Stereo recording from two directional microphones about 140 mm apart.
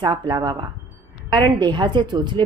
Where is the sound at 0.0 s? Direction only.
35° right (ahead or behind).